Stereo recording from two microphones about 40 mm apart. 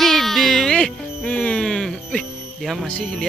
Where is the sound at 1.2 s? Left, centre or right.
Left.